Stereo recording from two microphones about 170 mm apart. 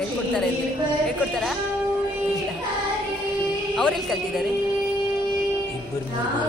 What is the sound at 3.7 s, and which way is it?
Speech, 5° left (ahead or behind).